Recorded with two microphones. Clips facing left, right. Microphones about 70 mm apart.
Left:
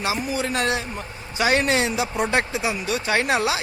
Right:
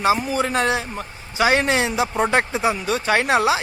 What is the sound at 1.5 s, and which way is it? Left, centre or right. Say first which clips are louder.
Speech: left 1 dB; right.